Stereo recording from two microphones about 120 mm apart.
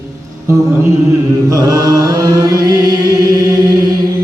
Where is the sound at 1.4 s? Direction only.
30° right (ahead or behind).